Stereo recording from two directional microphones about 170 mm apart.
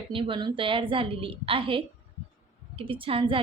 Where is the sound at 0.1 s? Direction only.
30° right (ahead or behind).